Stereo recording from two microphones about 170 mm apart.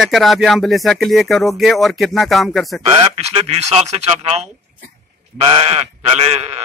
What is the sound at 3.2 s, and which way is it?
Speech, 40° right (ahead or behind).